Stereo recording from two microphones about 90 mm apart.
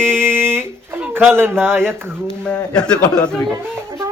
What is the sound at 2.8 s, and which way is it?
Speech, 10° left (ahead or behind).